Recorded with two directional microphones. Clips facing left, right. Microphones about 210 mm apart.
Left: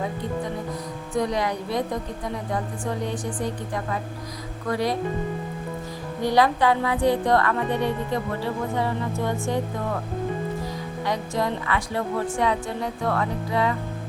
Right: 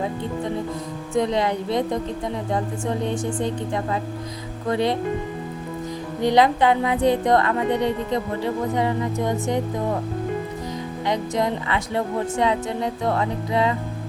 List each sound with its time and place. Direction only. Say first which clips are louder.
1.1 s speech: right 3 dB; 25° right (ahead or behind)
4.7 s speech: right 3 dB; 25° right (ahead or behind)
6.2 s speech: right 3 dB; 20° right (ahead or behind)
11.0 s speech: right 3 dB; 20° right (ahead or behind)